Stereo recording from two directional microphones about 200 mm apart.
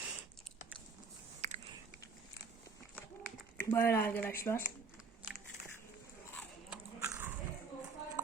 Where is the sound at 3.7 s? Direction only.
10° left (ahead or behind).